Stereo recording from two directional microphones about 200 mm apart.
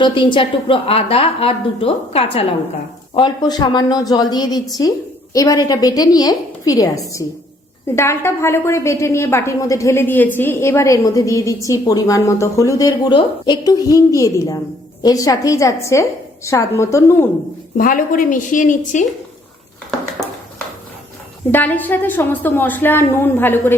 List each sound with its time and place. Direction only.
0.0 s a woman's voice: 25° left (ahead or behind)
17.7 s a woman's voice: 45° left (ahead or behind)
21.5 s a woman's voice: 10° left (ahead or behind)